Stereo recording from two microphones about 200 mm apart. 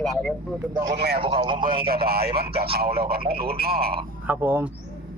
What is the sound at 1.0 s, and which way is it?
Speech, 55° right (ahead or behind).